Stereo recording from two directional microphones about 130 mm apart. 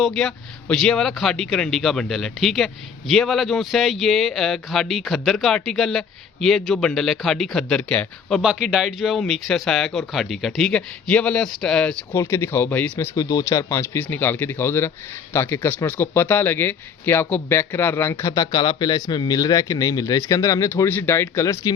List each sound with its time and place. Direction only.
0.0 s speech: 5° left (ahead or behind)
8.4 s speech: 5° right (ahead or behind)
12.1 s speech: 20° left (ahead or behind)
13.1 s speech: 25° left (ahead or behind)